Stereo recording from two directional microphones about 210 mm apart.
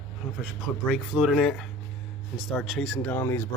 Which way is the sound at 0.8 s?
Centre (ahead or behind).